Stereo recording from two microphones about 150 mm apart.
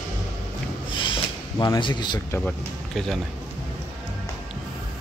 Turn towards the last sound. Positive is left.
turn(degrees=0)  # may be behind; listen again after turning